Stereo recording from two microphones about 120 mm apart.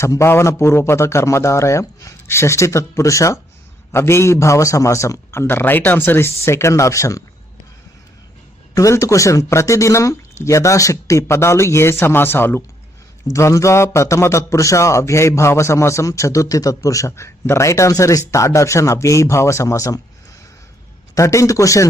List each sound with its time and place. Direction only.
0.0 s a man's voice: 25° left (ahead or behind)
8.7 s a man's voice: 25° left (ahead or behind)
21.2 s a man's voice: 25° left (ahead or behind)